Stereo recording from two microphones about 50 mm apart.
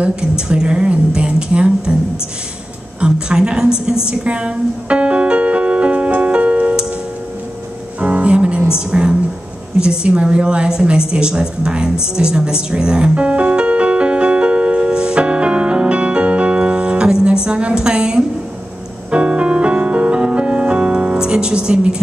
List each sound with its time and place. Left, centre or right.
0.0 s a woman's voice: centre
3.0 s a woman's voice: centre
8.0 s music: right
8.7 s a woman's voice: centre
9.8 s a sound: right
19.0 s music: right